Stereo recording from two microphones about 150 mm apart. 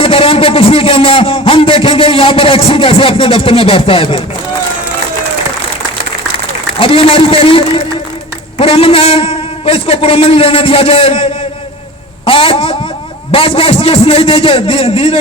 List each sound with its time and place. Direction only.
0.0 s a man's voice: 40° left (ahead or behind)
6.7 s a man's voice: 40° left (ahead or behind)